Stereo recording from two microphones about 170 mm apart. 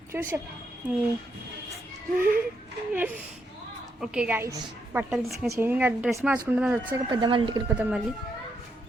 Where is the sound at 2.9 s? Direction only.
10° right (ahead or behind).